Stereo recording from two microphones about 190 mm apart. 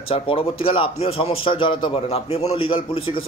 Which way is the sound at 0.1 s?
30° left (ahead or behind).